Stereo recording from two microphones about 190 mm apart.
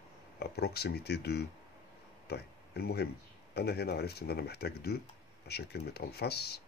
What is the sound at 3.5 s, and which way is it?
Speech, 60° left (ahead or behind).